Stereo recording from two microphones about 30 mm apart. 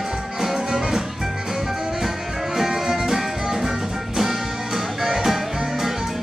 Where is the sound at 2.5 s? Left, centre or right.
Centre.